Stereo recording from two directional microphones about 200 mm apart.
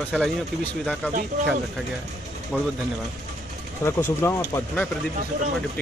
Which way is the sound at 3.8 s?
15° left (ahead or behind).